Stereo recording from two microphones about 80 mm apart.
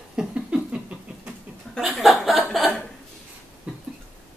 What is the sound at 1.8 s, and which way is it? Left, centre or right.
Chuckle, centre.